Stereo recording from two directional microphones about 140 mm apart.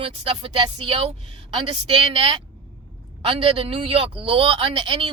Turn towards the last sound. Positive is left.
turn(degrees=-40)  # may be behind; listen again after turning